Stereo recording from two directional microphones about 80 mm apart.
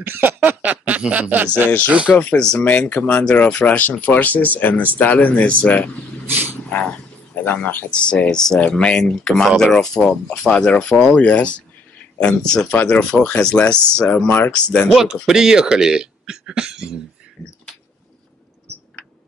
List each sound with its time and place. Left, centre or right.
0.0 s speech: right
2.1 s speech: centre
7.3 s speech: left
14.9 s speech: centre